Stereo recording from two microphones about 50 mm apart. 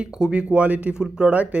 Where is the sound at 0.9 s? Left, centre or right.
Centre.